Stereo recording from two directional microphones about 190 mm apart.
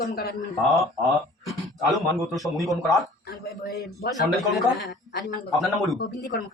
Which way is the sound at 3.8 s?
60° left (ahead or behind).